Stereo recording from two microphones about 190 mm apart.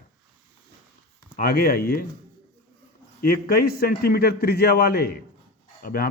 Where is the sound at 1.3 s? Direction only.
55° left (ahead or behind).